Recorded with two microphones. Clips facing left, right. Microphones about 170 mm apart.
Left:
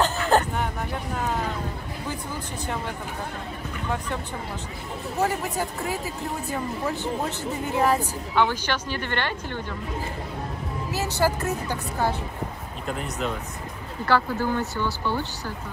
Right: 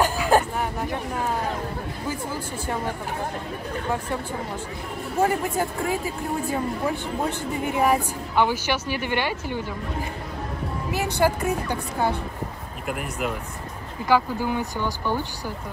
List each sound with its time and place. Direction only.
0.0 s hubbub: 10° right (ahead or behind)
7.2 s a woman's voice: 15° right (ahead or behind)
10.9 s a woman's voice: 15° right (ahead or behind)